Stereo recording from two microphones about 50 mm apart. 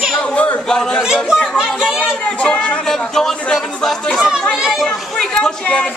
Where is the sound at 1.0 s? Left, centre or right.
Centre.